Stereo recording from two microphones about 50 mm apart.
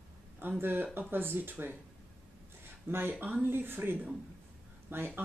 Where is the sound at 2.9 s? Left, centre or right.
Right.